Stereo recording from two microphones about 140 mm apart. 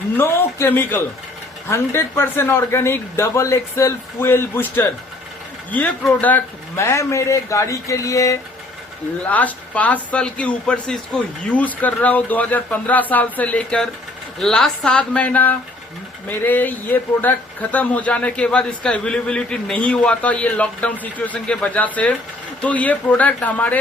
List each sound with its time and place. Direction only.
0.2 s a man's voice: 15° left (ahead or behind)
9.2 s a man's voice: 10° left (ahead or behind)